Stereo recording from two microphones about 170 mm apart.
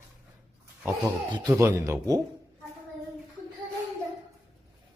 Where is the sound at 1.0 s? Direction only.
20° right (ahead or behind).